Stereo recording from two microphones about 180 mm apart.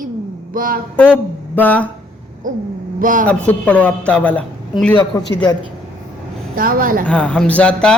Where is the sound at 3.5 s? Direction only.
10° left (ahead or behind).